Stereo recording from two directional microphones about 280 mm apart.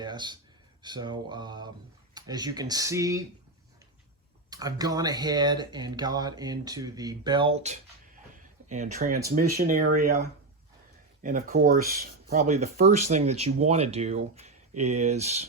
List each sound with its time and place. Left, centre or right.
0.0 s speech: centre
4.4 s speech: centre